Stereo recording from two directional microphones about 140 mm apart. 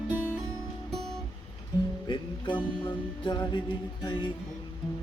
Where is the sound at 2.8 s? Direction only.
30° left (ahead or behind).